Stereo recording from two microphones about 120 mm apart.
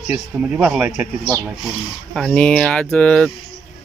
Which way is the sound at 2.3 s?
10° left (ahead or behind).